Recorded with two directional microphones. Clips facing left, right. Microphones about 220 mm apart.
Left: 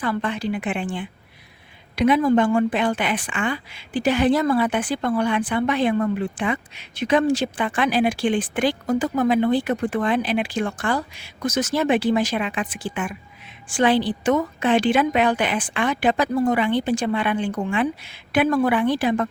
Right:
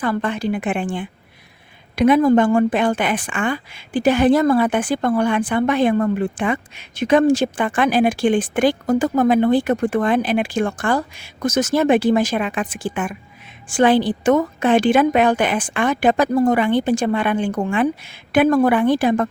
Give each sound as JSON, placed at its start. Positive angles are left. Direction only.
{"t": 0.0, "sound": "speech", "side_deg": -50}